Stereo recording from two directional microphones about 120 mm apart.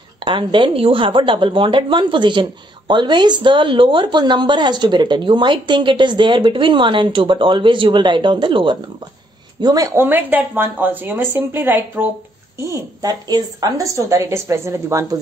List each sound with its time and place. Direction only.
0.2 s a woman's voice: 45° right (ahead or behind)
10.0 s a woman's voice: 15° right (ahead or behind)
12.5 s a woman's voice: 30° right (ahead or behind)